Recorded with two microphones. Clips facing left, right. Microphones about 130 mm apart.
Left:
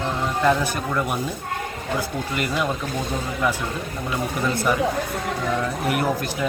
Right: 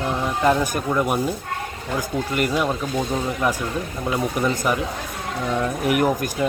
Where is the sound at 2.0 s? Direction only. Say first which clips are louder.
Right 6 dB; 50° right (ahead or behind).